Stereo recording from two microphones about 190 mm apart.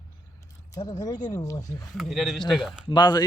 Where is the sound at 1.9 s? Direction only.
Centre (ahead or behind).